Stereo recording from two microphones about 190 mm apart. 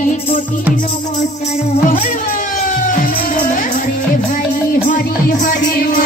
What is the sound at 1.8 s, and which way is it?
Music, 45° left (ahead or behind).